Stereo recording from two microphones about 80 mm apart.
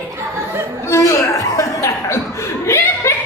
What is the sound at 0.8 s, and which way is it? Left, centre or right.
Chuckle, left.